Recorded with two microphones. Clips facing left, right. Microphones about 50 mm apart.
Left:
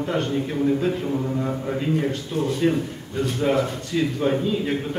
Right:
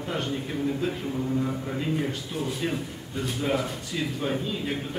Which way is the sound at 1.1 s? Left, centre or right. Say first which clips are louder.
Left 3 dB; left.